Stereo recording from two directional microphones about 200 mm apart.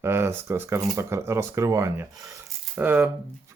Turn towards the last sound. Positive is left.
turn(degrees=-10)  # may be behind; listen again after turning